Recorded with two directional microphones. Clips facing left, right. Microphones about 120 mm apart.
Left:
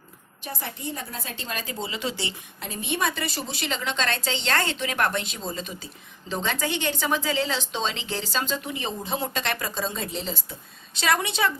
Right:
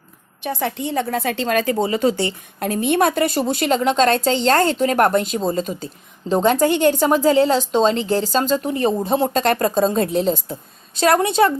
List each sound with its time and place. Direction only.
0.4 s a woman's voice: 85° right; by 11.5 s 40° right (ahead or behind)